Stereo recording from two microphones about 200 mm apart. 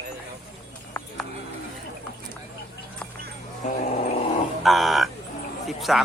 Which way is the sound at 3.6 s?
35° left (ahead or behind).